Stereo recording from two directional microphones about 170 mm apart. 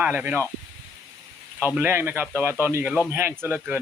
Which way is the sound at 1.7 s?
10° right (ahead or behind).